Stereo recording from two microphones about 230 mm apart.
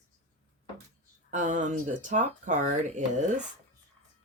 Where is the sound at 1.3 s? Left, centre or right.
Right.